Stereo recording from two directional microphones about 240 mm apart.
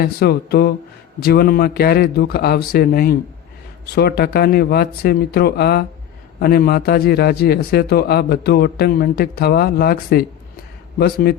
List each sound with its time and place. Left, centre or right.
0.0 s a man's voice: left